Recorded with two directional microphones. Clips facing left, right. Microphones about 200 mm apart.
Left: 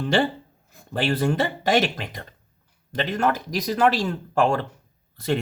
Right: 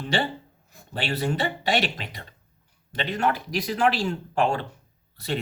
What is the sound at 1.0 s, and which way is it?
Speech, 45° left (ahead or behind).